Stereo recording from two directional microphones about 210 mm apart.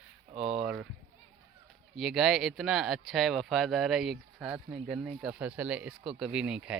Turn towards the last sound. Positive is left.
turn(degrees=-5)  # may be behind; listen again after turning